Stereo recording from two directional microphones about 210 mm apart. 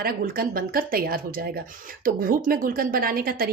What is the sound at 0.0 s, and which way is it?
Speech, 45° right (ahead or behind).